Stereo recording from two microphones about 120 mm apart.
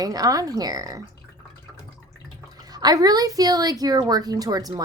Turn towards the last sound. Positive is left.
turn(degrees=-30)  # may be behind; listen again after turning